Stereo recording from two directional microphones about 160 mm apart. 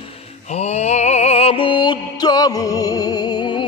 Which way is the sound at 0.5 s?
40° left (ahead or behind).